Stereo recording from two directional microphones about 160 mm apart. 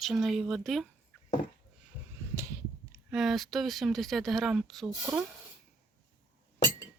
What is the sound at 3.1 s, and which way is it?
Speech, centre (ahead or behind).